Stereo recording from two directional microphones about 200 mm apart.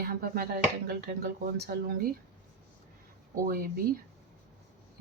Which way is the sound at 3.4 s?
45° right (ahead or behind).